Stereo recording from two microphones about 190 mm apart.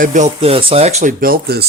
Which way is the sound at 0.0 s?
40° right (ahead or behind).